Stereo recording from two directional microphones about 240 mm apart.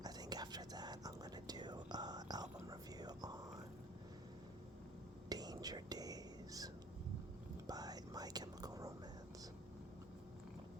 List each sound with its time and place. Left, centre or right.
0.0 s whispering: centre
5.3 s whispering: centre
7.7 s whispering: centre